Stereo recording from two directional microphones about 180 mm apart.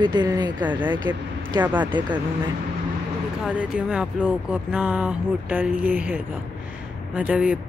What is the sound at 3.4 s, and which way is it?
Speech, 5° right (ahead or behind).